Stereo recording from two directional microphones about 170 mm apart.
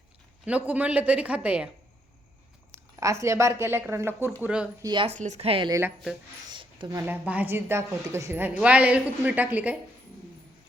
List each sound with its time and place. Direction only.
0.4 s a woman's voice: 10° right (ahead or behind)
2.9 s a woman's voice: 15° right (ahead or behind)
4.8 s speech: 25° right (ahead or behind)
5.0 s speech: 45° right (ahead or behind)
6.5 s a sound: 30° right (ahead or behind)
7.0 s a woman's voice: 10° right (ahead or behind)